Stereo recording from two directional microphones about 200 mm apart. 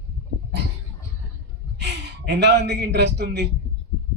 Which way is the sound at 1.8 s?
60° right (ahead or behind).